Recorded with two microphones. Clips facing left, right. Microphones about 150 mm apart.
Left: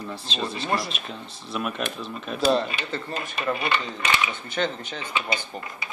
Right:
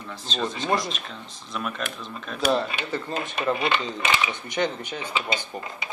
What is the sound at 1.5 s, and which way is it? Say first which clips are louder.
Speech: left 2 dB; 5° left (ahead or behind).